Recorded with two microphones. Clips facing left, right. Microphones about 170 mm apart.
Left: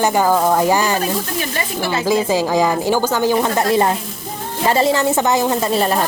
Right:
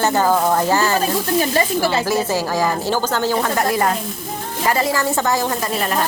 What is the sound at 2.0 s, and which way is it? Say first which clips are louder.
A woman's voice: left 3 dB; 15° left (ahead or behind).